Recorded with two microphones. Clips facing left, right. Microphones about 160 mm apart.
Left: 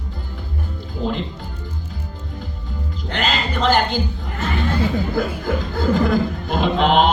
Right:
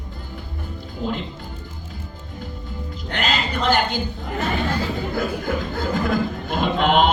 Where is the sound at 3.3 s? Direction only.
45° left (ahead or behind).